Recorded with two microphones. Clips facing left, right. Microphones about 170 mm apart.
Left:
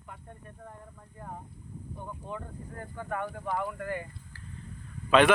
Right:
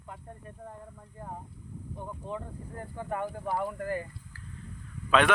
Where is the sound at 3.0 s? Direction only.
30° right (ahead or behind).